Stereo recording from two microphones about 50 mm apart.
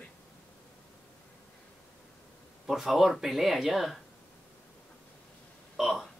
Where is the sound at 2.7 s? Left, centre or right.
Centre.